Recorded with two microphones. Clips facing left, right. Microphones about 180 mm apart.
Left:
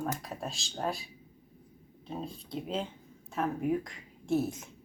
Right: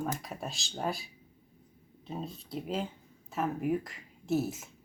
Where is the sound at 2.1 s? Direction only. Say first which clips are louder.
Even; centre (ahead or behind).